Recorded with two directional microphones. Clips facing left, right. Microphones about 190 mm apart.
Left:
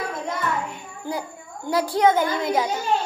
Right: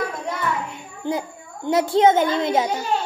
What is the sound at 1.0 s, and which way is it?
A child's voice, 20° right (ahead or behind).